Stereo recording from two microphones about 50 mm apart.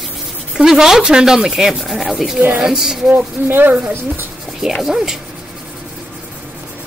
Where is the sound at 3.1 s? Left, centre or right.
Right.